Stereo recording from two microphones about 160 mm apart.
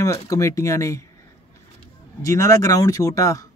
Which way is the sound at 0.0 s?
20° left (ahead or behind).